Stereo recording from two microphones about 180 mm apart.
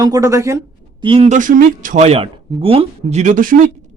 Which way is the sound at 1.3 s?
45° right (ahead or behind).